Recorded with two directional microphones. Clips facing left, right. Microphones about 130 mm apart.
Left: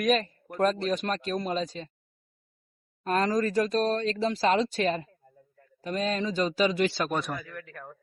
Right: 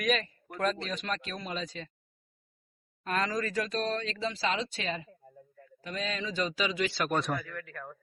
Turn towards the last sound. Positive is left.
turn(degrees=25)  # may be behind; listen again after turning